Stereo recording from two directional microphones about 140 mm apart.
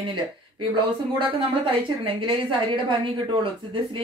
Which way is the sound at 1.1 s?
40° right (ahead or behind).